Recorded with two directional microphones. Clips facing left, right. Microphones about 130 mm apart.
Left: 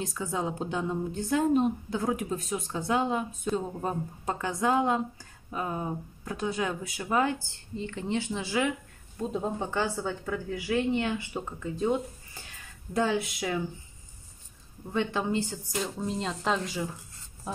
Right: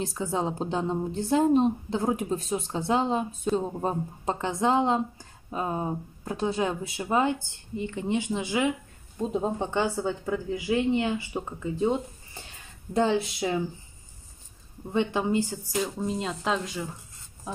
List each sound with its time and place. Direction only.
0.0 s a woman's voice: 30° right (ahead or behind)
14.9 s speech: 20° right (ahead or behind); by 16.8 s centre (ahead or behind)